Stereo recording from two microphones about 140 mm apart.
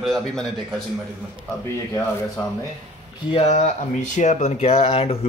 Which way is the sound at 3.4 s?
60° left (ahead or behind).